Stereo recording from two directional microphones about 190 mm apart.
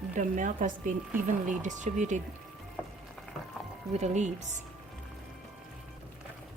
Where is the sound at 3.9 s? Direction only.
35° right (ahead or behind).